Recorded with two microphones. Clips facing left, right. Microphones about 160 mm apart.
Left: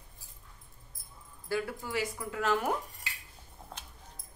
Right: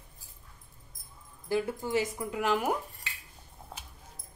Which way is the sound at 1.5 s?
20° right (ahead or behind).